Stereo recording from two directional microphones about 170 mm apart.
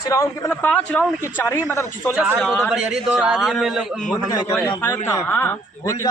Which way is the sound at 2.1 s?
10° right (ahead or behind).